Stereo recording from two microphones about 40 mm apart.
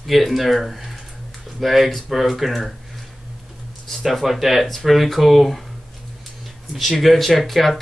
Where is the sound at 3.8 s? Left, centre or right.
Centre.